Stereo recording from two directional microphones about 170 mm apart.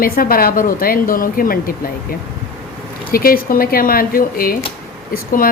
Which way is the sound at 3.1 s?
60° left (ahead or behind).